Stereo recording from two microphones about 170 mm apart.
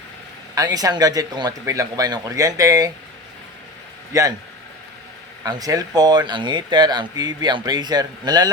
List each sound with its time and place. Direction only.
0.5 s speech: 20° right (ahead or behind)
4.1 s speech: 20° right (ahead or behind)
5.5 s speech: 20° right (ahead or behind)